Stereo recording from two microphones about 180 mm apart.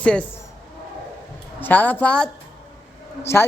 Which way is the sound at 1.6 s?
10° left (ahead or behind).